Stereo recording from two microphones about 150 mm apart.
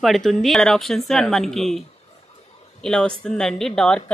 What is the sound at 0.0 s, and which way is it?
A woman's voice, centre (ahead or behind).